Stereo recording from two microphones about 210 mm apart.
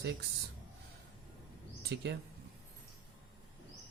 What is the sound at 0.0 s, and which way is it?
Speech, 50° right (ahead or behind).